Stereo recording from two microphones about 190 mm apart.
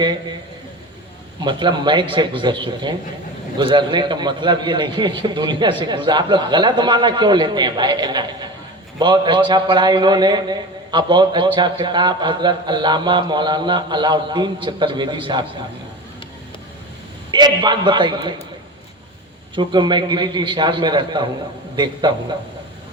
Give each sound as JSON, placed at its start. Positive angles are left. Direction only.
{"t": 0.0, "sound": "a man's voice", "side_deg": -25}
{"t": 1.5, "sound": "a man's voice", "side_deg": -25}
{"t": 17.3, "sound": "a man's voice", "side_deg": -25}
{"t": 19.5, "sound": "a man's voice", "side_deg": -25}